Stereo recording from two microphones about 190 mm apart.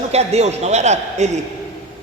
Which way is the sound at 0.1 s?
35° right (ahead or behind).